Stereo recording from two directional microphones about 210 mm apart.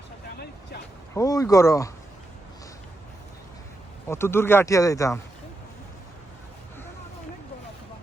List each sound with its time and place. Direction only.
1.1 s speech: 15° left (ahead or behind)
4.1 s speech: 10° left (ahead or behind)